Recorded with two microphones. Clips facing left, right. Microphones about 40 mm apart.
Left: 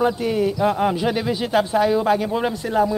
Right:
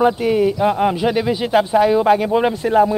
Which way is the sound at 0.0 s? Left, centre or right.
Centre.